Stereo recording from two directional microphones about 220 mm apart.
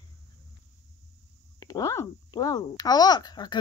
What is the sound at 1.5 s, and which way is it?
Speech, 15° left (ahead or behind).